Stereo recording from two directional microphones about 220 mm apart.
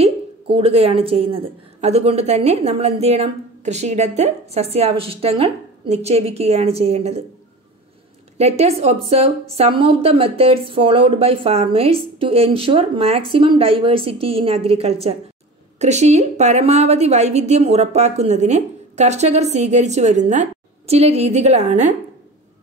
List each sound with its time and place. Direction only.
0.0 s a woman's voice: 25° right (ahead or behind)
8.4 s a woman's voice: 30° right (ahead or behind)